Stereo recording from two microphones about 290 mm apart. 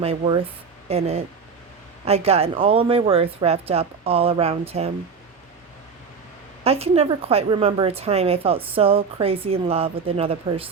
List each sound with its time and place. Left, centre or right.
0.0 s a woman's voice: centre
6.7 s a woman's voice: right